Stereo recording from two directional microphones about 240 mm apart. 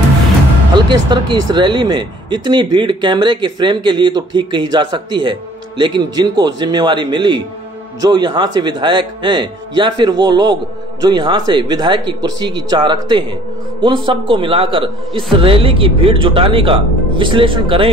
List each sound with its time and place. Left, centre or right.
0.8 s speech: centre